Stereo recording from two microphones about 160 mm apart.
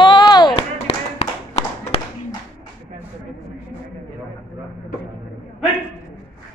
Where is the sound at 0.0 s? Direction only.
30° left (ahead or behind).